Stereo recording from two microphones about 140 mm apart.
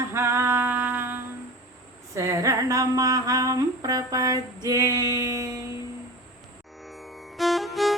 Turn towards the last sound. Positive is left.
turn(degrees=0)  # may be behind; listen again after turning